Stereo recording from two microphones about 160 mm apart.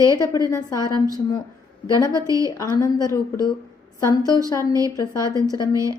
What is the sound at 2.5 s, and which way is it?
Speech, 20° left (ahead or behind).